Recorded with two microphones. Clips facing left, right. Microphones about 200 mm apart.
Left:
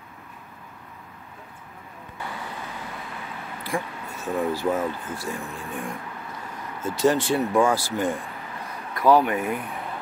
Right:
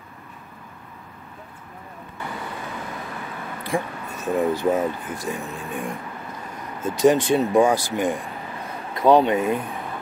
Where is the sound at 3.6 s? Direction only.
20° right (ahead or behind).